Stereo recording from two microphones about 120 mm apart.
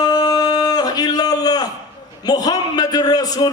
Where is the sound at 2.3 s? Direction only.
35° left (ahead or behind).